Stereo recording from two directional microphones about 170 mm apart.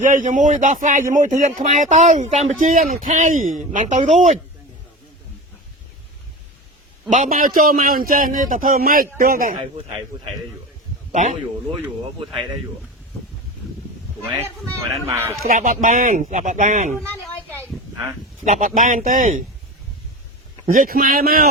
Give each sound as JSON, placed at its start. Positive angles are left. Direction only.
{"t": 0.0, "sound": "speech", "side_deg": -50}
{"t": 7.1, "sound": "a man's voice", "side_deg": -50}
{"t": 11.1, "sound": "speech", "side_deg": -45}
{"t": 15.1, "sound": "a man's voice", "side_deg": -15}
{"t": 15.4, "sound": "speech", "side_deg": -55}
{"t": 18.4, "sound": "speech", "side_deg": -50}
{"t": 20.7, "sound": "a man's voice", "side_deg": -55}